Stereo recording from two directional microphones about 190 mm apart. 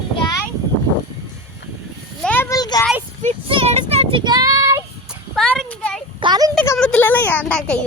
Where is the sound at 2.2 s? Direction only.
10° left (ahead or behind).